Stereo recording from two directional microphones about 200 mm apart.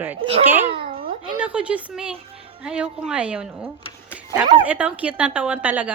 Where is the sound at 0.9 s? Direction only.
45° right (ahead or behind).